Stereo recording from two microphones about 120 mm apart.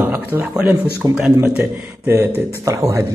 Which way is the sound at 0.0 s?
15° right (ahead or behind).